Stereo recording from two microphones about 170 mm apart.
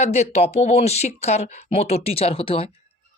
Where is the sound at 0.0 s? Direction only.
40° left (ahead or behind).